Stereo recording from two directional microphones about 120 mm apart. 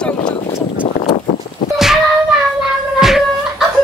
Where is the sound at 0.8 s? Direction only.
50° left (ahead or behind).